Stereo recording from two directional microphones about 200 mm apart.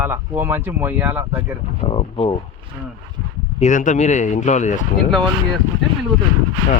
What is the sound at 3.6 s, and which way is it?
Speech, 40° left (ahead or behind).